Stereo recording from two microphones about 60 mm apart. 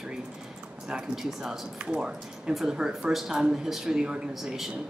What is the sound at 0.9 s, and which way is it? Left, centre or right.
Speech, centre.